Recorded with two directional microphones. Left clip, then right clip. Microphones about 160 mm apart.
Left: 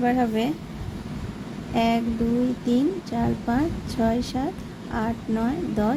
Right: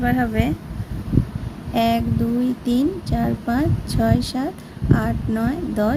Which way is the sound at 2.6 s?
30° right (ahead or behind).